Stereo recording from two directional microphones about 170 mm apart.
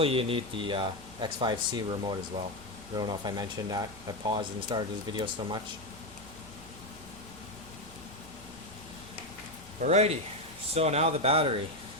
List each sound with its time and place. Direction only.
0.0 s speech: 35° right (ahead or behind)
9.8 s speech: 40° right (ahead or behind)